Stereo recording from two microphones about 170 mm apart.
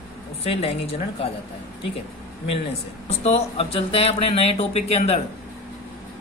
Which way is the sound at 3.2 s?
40° left (ahead or behind).